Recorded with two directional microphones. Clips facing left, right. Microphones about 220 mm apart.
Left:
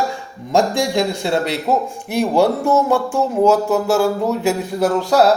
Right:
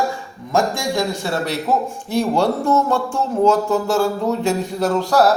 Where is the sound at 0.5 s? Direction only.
30° left (ahead or behind).